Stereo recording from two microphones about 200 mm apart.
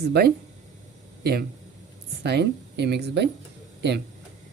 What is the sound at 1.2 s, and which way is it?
Speech, 50° right (ahead or behind).